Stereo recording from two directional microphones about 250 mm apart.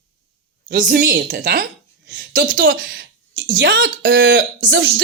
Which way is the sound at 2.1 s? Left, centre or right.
Right.